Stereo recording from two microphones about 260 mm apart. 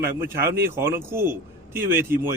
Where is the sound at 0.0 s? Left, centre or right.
Centre.